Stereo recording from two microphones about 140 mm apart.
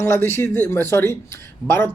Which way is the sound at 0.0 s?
15° left (ahead or behind).